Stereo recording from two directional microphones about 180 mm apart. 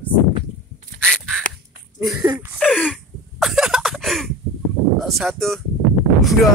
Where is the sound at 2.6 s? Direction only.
5° left (ahead or behind).